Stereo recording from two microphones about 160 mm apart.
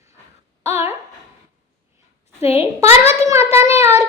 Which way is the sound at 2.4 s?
40° left (ahead or behind).